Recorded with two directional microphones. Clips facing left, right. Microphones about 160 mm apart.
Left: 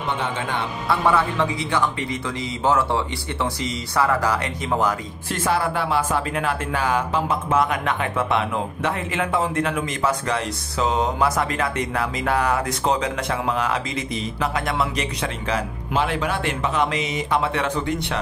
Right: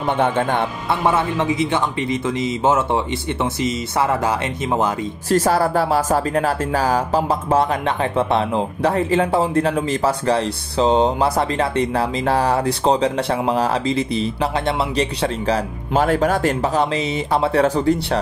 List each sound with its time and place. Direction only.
0.1 s speech: 55° right (ahead or behind)
0.8 s a man's voice: 20° right (ahead or behind)
5.3 s speech: 40° right (ahead or behind)